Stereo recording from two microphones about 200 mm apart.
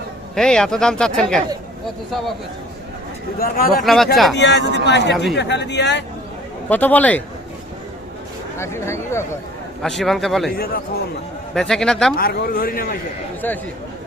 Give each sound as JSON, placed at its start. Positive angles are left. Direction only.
{"t": 0.3, "sound": "speech", "side_deg": 5}
{"t": 3.3, "sound": "a man's voice", "side_deg": 45}
{"t": 3.8, "sound": "speech", "side_deg": 0}
{"t": 4.4, "sound": "speech", "side_deg": 60}
{"t": 6.7, "sound": "speech", "side_deg": 10}
{"t": 8.5, "sound": "speech", "side_deg": 15}
{"t": 9.8, "sound": "speech", "side_deg": 0}
{"t": 10.5, "sound": "a man's voice", "side_deg": 45}
{"t": 11.5, "sound": "speech", "side_deg": 0}
{"t": 12.1, "sound": "a man's voice", "side_deg": 50}